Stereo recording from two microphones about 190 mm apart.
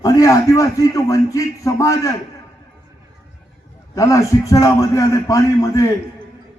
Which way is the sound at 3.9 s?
15° left (ahead or behind).